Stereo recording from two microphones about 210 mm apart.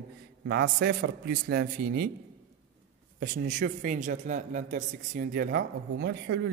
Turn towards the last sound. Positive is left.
turn(degrees=-55)  # may be behind; listen again after turning